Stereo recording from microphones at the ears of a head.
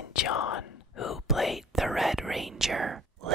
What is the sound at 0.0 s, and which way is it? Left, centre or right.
Whispering, left.